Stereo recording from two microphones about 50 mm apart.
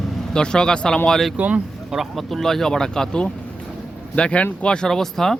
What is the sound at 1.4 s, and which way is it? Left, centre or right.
Speech, right.